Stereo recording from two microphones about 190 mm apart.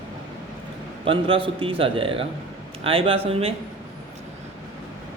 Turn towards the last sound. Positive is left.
turn(degrees=-30)  # may be behind; listen again after turning